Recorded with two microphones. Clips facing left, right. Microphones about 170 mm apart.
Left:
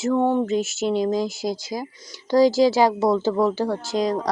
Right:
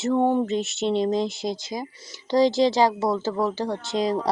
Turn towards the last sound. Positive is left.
turn(degrees=0)  # may be behind; listen again after turning